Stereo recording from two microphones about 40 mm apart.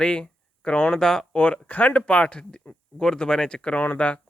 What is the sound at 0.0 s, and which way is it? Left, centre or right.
Speech, left.